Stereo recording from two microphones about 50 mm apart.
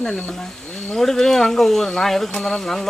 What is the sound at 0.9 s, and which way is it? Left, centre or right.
Speech, centre.